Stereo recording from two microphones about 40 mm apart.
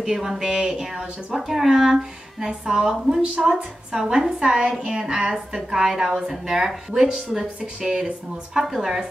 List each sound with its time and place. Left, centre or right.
0.0 s a woman's voice: centre
0.4 s speech: centre
1.3 s a woman's voice: centre
7.6 s speech: right
8.5 s a woman's voice: centre